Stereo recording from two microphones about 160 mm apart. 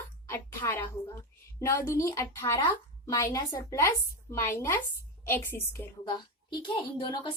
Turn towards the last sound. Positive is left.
turn(degrees=30)  # may be behind; listen again after turning